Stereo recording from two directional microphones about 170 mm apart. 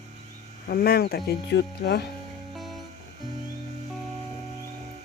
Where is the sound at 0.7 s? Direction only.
65° left (ahead or behind).